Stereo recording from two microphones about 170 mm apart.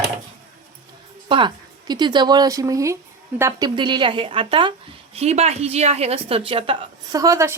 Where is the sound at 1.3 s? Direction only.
25° right (ahead or behind).